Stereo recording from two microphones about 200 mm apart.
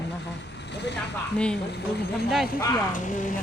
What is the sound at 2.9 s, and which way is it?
Speech, 40° left (ahead or behind).